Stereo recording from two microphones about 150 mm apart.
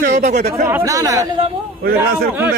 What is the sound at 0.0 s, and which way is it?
Speech, 60° right (ahead or behind).